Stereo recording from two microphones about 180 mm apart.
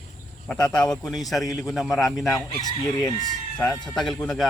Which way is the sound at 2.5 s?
20° left (ahead or behind).